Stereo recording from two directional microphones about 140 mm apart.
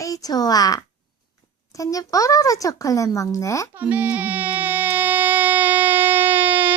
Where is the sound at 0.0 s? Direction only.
25° left (ahead or behind).